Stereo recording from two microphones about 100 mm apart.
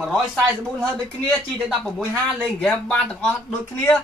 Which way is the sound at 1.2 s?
5° left (ahead or behind).